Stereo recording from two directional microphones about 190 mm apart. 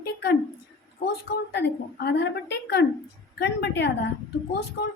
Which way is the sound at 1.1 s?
60° left (ahead or behind).